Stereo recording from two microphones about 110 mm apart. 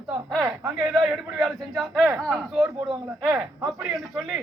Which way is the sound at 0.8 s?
5° right (ahead or behind).